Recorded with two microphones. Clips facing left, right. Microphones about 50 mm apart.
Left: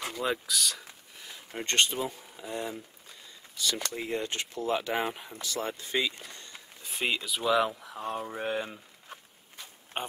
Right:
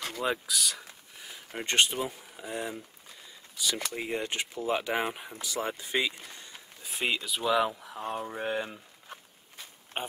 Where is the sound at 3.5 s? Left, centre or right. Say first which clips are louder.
Even; centre.